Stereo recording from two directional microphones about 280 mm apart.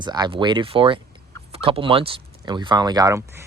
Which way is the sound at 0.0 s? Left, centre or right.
Centre.